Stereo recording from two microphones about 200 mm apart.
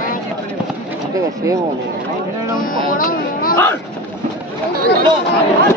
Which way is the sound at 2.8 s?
45° left (ahead or behind).